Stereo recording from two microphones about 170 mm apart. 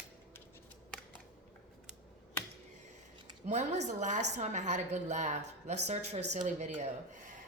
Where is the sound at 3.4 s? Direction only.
40° right (ahead or behind).